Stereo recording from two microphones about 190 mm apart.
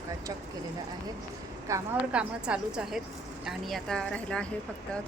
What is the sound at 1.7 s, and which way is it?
A woman's voice, 5° right (ahead or behind).